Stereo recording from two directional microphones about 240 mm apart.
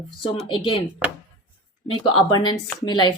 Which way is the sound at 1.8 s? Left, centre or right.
Centre.